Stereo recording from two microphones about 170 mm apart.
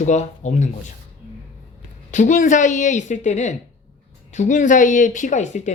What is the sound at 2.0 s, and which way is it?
Speech, 45° left (ahead or behind).